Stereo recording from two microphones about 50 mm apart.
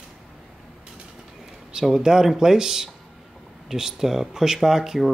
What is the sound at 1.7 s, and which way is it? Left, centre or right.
Speech, centre.